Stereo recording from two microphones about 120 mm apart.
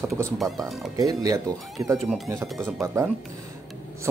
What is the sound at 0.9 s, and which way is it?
Speech, 30° right (ahead or behind).